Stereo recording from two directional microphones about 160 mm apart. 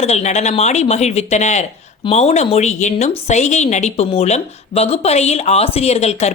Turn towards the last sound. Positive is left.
turn(degrees=45)  # may be behind; listen again after turning